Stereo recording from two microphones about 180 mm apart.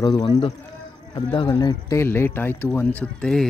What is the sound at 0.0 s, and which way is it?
Speech, 20° left (ahead or behind).